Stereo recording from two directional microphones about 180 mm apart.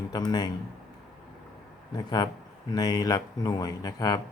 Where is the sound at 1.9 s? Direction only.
20° left (ahead or behind).